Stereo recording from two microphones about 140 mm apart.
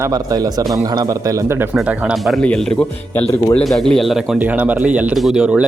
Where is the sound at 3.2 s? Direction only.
20° left (ahead or behind).